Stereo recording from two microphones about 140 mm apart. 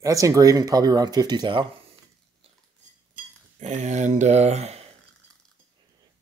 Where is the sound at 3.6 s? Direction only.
55° right (ahead or behind).